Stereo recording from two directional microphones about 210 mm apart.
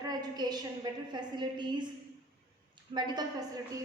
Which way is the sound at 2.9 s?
20° right (ahead or behind).